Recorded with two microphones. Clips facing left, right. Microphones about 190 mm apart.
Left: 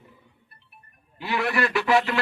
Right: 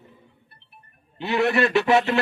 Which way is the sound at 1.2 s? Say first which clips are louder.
Right 5 dB; 25° right (ahead or behind).